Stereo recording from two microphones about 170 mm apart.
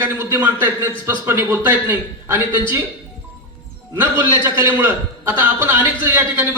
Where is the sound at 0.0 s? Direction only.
10° right (ahead or behind).